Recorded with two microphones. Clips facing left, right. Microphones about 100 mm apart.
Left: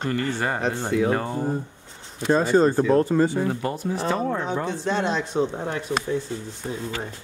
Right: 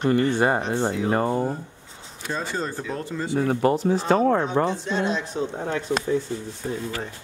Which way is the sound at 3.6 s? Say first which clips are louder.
Right 5 dB; 65° right (ahead or behind).